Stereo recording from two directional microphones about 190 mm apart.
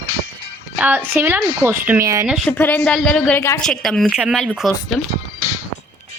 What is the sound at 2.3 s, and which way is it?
Speech, centre (ahead or behind).